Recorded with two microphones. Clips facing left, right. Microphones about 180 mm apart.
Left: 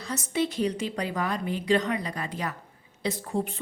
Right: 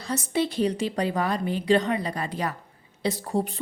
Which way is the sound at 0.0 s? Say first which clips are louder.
Right 2 dB; 35° right (ahead or behind).